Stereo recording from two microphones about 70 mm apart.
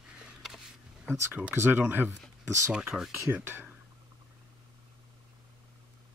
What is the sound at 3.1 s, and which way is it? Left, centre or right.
Speech, right.